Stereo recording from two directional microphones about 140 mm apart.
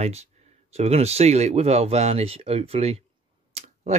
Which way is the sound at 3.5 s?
50° right (ahead or behind).